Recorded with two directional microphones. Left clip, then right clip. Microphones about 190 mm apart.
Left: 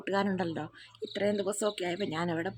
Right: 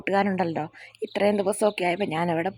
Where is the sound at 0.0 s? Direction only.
25° right (ahead or behind).